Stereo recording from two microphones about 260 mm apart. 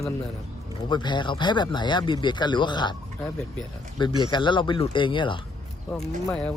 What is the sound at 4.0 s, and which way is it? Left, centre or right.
Speech, centre.